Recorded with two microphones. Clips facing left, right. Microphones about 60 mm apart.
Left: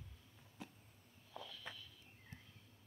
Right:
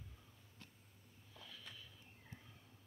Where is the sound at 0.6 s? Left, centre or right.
Centre.